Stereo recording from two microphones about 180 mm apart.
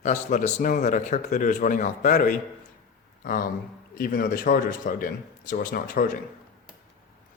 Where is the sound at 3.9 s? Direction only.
55° left (ahead or behind).